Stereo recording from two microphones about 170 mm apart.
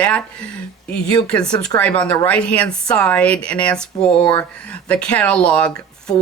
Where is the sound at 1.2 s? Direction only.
5° left (ahead or behind).